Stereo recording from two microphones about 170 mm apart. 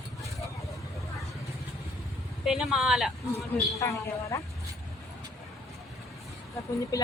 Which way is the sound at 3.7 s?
20° left (ahead or behind).